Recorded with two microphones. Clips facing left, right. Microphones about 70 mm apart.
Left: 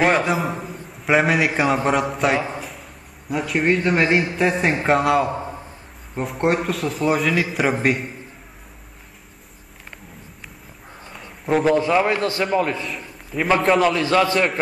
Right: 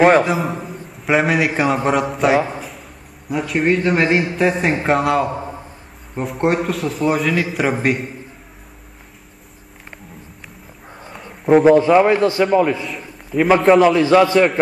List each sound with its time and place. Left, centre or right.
0.0 s a man's voice: centre
11.4 s a man's voice: centre
11.7 s a man's voice: centre
12.4 s a man's voice: centre
13.9 s a man's voice: right